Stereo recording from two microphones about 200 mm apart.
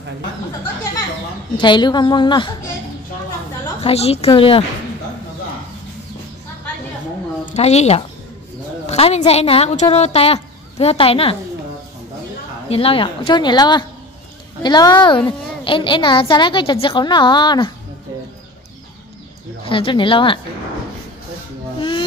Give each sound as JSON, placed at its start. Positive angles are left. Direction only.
{"t": 1.6, "sound": "a child's voice", "side_deg": 20}
{"t": 3.8, "sound": "a child's voice", "side_deg": 30}
{"t": 7.5, "sound": "a woman's voice", "side_deg": 35}
{"t": 12.6, "sound": "a child's voice", "side_deg": 30}
{"t": 19.6, "sound": "a child's voice", "side_deg": 25}
{"t": 21.7, "sound": "a sound", "side_deg": 25}